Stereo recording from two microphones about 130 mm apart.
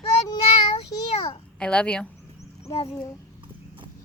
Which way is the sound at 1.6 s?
10° left (ahead or behind).